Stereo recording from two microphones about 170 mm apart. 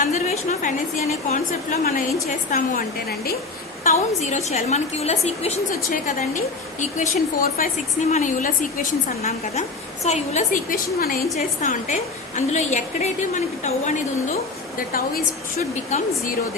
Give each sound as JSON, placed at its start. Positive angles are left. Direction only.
{"t": 0.0, "sound": "a sound", "side_deg": 45}
{"t": 1.8, "sound": "a woman's voice", "side_deg": 50}
{"t": 3.8, "sound": "a woman's voice", "side_deg": 45}
{"t": 11.3, "sound": "a woman's voice", "side_deg": 45}
{"t": 14.8, "sound": "a woman's voice", "side_deg": 60}
{"t": 15.7, "sound": "a woman's voice", "side_deg": 45}